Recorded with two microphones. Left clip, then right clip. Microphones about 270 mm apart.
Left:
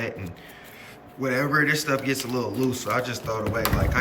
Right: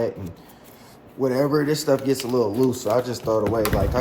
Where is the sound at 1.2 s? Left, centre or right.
Centre.